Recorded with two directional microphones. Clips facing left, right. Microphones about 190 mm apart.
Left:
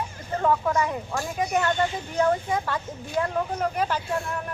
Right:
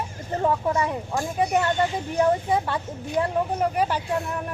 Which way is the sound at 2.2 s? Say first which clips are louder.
Right 2 dB; 25° right (ahead or behind).